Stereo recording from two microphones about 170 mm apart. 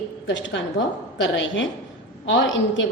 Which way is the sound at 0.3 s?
90° left.